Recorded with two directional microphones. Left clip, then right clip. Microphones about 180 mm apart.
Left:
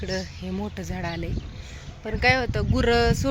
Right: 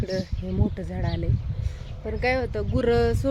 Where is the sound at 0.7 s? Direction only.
15° right (ahead or behind).